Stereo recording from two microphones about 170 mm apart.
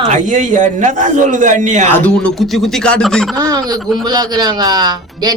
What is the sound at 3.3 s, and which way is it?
A woman's voice, 25° right (ahead or behind).